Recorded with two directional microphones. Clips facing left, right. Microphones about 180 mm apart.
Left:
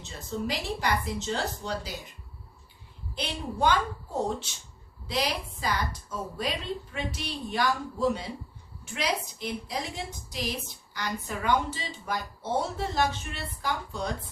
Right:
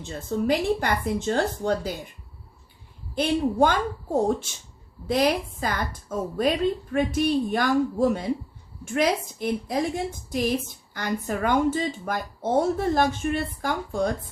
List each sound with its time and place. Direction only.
0.0 s speech: 55° right (ahead or behind)
3.2 s speech: 50° right (ahead or behind)